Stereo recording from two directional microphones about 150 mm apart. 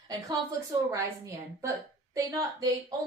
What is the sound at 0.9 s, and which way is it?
A woman's voice, 20° right (ahead or behind).